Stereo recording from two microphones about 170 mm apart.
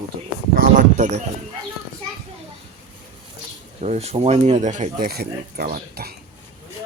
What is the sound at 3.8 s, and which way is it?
Speech, 40° right (ahead or behind).